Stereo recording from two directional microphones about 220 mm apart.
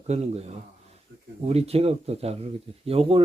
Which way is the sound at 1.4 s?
30° right (ahead or behind).